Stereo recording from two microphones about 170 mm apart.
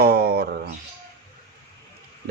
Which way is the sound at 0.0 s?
70° right (ahead or behind).